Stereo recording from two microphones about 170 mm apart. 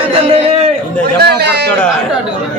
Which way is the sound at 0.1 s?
35° right (ahead or behind).